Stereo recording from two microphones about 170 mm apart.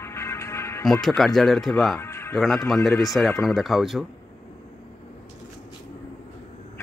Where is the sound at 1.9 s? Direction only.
15° left (ahead or behind).